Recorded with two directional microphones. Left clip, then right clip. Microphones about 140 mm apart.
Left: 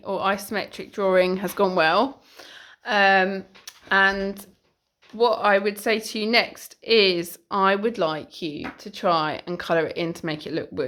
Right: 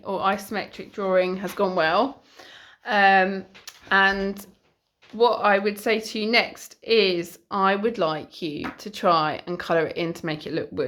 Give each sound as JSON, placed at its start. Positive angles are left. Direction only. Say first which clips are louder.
{"t": 0.0, "sound": "a woman's voice", "louder": "even", "side_deg": 15}
{"t": 8.8, "sound": "speech", "louder": "right 2 dB", "side_deg": 0}
{"t": 9.1, "sound": "a woman's voice", "louder": "right 1 dB", "side_deg": 15}